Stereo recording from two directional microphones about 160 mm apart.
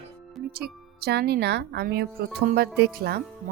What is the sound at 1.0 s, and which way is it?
Speech, 90° right.